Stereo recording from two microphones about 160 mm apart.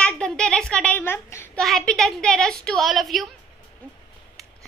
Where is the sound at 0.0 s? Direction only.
5° left (ahead or behind).